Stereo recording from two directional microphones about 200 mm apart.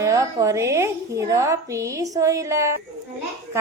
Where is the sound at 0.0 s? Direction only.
15° right (ahead or behind).